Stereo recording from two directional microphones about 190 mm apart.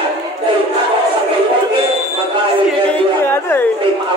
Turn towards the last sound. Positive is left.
turn(degrees=10)  # may be behind; listen again after turning